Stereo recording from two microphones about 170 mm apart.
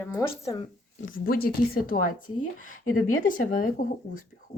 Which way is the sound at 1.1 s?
60° left (ahead or behind).